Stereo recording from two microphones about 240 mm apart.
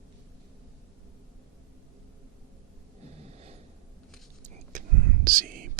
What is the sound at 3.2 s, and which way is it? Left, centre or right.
Gasp, right.